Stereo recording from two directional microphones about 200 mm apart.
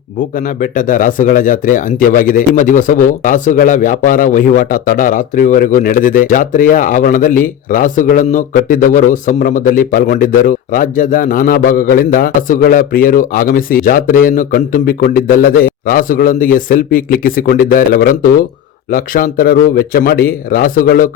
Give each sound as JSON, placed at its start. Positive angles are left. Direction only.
{"t": 0.3, "sound": "a man's voice", "side_deg": 40}